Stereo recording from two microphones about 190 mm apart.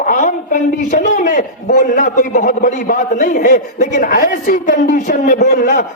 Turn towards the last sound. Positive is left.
turn(degrees=45)  # may be behind; listen again after turning